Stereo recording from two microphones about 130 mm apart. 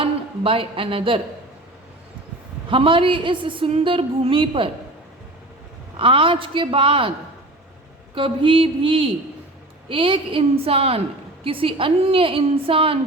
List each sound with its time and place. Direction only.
0.0 s a woman's voice: 45° right (ahead or behind)
2.6 s a woman's voice: 40° right (ahead or behind)
6.0 s a woman's voice: 45° right (ahead or behind)
8.1 s a woman's voice: 40° right (ahead or behind)